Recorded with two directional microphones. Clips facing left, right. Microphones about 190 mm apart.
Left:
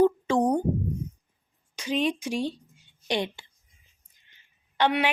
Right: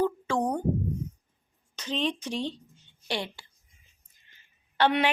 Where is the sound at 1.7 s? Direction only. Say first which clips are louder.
Left 4 dB; 10° left (ahead or behind).